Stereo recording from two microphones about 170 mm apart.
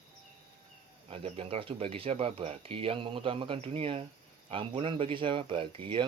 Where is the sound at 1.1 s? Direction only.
30° right (ahead or behind).